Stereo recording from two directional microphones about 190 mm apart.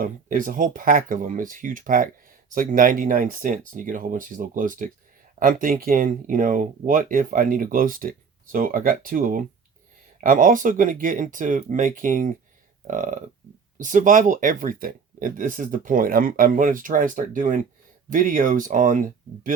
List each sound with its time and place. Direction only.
0.0 s speech: 45° right (ahead or behind)